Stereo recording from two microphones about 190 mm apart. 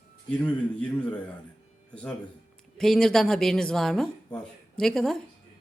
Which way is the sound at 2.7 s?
Centre (ahead or behind).